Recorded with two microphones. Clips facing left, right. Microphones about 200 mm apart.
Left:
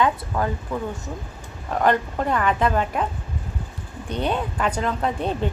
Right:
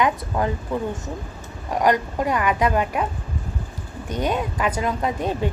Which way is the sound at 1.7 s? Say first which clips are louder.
Right 1 dB; 10° right (ahead or behind).